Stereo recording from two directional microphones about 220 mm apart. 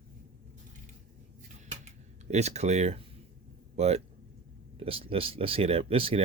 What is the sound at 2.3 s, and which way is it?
Speech, 30° right (ahead or behind).